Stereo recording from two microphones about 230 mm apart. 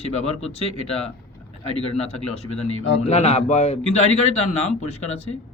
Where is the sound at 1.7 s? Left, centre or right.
Left.